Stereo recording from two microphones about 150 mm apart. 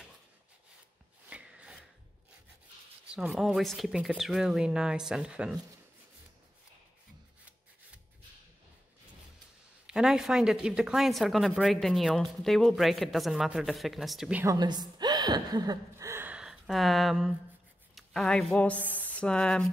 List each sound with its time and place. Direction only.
1.3 s wood: 5° right (ahead or behind)
3.2 s speech: centre (ahead or behind)
9.8 s speech: 5° right (ahead or behind)
14.4 s a woman's voice: 25° right (ahead or behind); by 19.7 s 5° left (ahead or behind)